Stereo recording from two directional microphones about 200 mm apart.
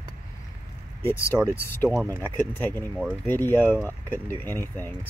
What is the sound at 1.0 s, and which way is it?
Speech, 10° left (ahead or behind).